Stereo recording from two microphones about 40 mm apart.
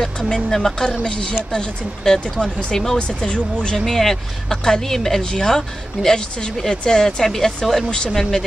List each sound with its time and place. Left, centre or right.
0.5 s speech: centre
3.0 s speech: left
3.7 s speech: centre
7.2 s speech: centre